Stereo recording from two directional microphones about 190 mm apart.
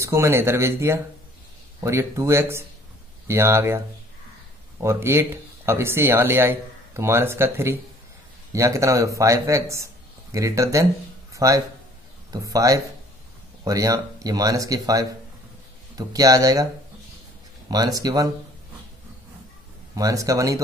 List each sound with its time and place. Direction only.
0.0 s speech: 15° right (ahead or behind)
17.6 s speech: 20° right (ahead or behind)
20.0 s speech: 15° right (ahead or behind)